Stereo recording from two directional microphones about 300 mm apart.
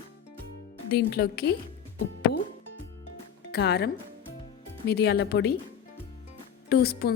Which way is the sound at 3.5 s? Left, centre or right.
Left.